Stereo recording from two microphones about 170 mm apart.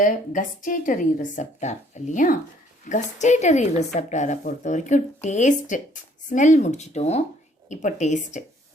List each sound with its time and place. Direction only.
0.0 s a woman's voice: 50° left (ahead or behind)